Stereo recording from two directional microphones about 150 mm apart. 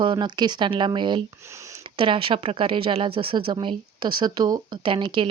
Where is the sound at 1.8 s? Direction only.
35° right (ahead or behind).